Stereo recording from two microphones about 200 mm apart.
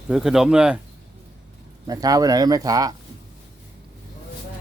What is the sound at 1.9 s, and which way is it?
Speech, 20° right (ahead or behind).